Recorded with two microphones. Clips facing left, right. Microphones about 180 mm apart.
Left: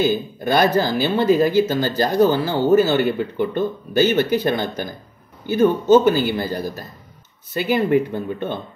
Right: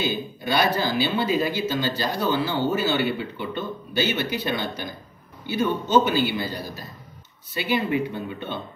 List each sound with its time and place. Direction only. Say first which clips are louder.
0.0 s speech: left 7 dB; 45° left (ahead or behind)